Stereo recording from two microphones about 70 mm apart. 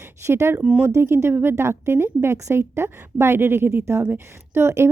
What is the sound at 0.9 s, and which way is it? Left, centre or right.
Speech, right.